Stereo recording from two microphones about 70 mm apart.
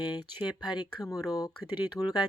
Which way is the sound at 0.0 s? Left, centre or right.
Left.